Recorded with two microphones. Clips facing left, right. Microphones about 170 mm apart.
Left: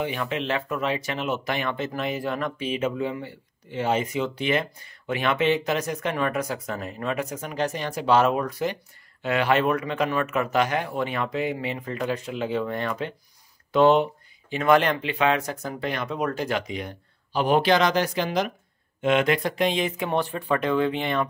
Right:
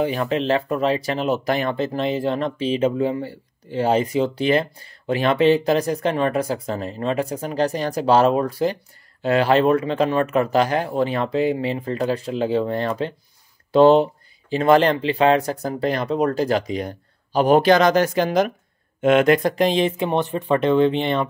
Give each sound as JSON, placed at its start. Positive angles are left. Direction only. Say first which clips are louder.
{"t": 0.0, "sound": "speech", "louder": "right 6 dB", "side_deg": -35}
{"t": 20.1, "sound": "speech", "louder": "right 4 dB", "side_deg": -20}